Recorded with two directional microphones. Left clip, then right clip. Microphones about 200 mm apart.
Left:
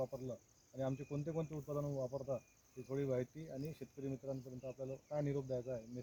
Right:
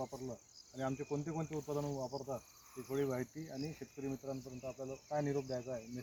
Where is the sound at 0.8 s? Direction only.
45° left (ahead or behind).